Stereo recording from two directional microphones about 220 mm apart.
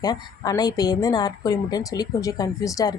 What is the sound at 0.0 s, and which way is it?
A woman's voice, 15° left (ahead or behind).